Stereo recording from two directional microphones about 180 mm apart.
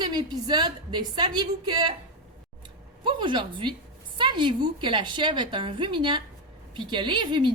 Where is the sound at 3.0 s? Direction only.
25° right (ahead or behind).